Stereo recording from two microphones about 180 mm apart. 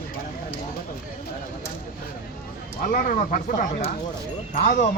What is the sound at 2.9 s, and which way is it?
Speech, 50° left (ahead or behind).